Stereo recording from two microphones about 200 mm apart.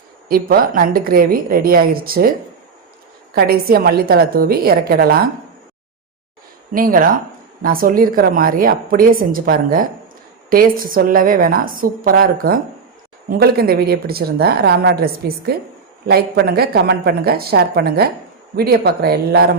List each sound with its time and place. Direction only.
0.3 s a woman's voice: 50° right (ahead or behind)
3.3 s a woman's voice: 50° right (ahead or behind)
6.7 s a woman's voice: 45° right (ahead or behind)